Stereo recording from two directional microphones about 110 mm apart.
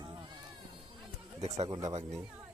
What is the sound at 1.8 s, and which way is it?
Speech, 90° right.